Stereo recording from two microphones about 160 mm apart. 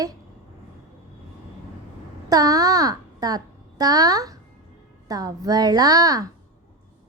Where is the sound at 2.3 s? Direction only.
25° right (ahead or behind).